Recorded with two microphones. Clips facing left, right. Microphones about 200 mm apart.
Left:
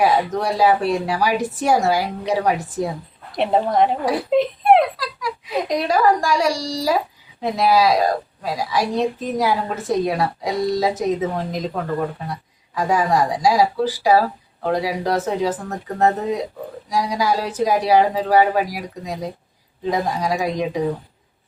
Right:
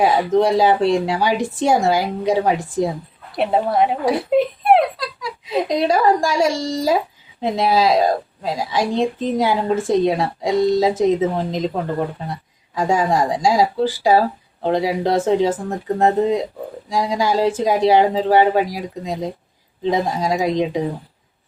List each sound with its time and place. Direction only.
0.0 s a woman's voice: 25° right (ahead or behind)
3.3 s a woman's voice: 5° right (ahead or behind)
4.3 s a sound: 5° right (ahead or behind)
4.9 s a child's voice: 25° right (ahead or behind)